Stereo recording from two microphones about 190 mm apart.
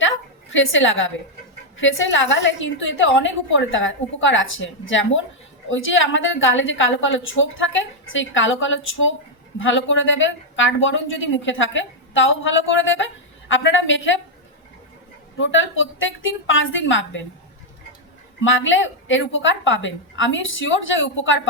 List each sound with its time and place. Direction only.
0.5 s a woman's voice: 90° left
15.4 s a woman's voice: 90° left
18.3 s a woman's voice: 85° left